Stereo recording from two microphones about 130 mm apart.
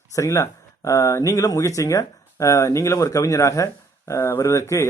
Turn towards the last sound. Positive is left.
turn(degrees=25)  # may be behind; listen again after turning